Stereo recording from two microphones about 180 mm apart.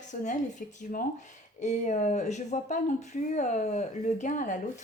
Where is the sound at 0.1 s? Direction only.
45° left (ahead or behind).